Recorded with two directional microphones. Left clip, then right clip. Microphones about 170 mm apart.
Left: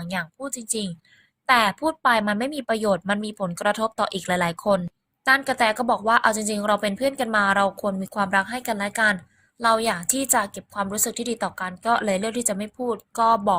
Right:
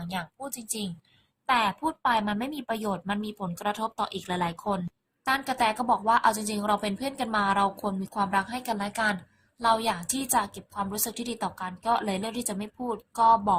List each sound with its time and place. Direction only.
0.1 s a woman's voice: 20° left (ahead or behind)